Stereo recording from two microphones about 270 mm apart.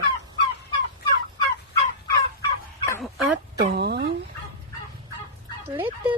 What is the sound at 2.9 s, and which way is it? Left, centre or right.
Dog, centre.